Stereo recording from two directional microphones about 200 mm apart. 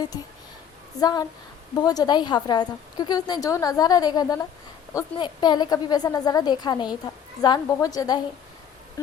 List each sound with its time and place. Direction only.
0.9 s a woman's voice: 20° left (ahead or behind)